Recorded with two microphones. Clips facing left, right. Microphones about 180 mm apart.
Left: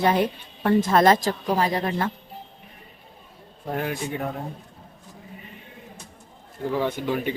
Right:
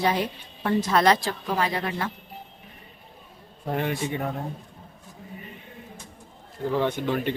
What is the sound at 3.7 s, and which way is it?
Speech, centre (ahead or behind).